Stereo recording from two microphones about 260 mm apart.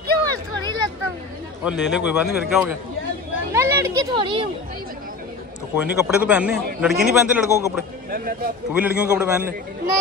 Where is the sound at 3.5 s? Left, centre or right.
Centre.